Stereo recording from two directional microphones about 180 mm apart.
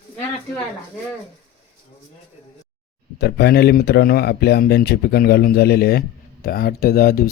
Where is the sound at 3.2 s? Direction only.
65° left (ahead or behind).